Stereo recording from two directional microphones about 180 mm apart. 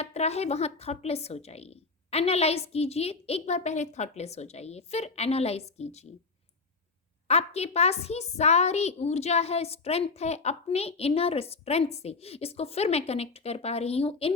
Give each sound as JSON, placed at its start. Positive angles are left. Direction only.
{"t": 0.0, "sound": "a woman's voice", "side_deg": 35}
{"t": 7.3, "sound": "a woman's voice", "side_deg": 35}